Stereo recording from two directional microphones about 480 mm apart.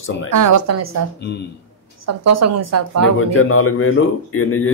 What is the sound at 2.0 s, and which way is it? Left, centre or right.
Speech, right.